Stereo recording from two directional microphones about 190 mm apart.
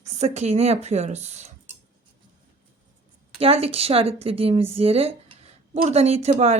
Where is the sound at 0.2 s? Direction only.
35° right (ahead or behind).